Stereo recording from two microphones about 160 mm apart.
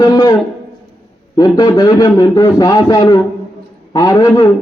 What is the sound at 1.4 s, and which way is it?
A man's voice, 25° left (ahead or behind).